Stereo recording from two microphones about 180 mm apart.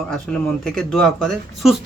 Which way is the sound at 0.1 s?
5° left (ahead or behind).